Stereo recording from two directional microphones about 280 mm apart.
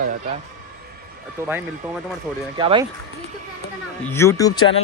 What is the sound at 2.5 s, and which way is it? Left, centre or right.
Speech, centre.